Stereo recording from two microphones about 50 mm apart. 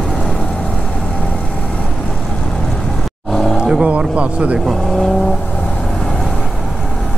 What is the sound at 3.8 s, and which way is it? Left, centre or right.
Speech, right.